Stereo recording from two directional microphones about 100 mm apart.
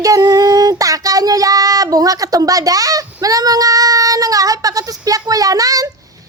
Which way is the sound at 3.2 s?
35° right (ahead or behind).